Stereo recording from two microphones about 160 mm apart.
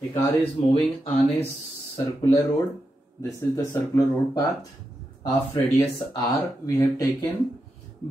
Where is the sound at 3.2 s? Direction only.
15° left (ahead or behind).